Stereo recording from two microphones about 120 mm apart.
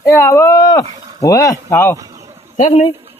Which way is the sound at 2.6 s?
90° left.